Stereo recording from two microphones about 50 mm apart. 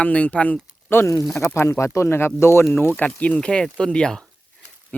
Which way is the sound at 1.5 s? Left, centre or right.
Left.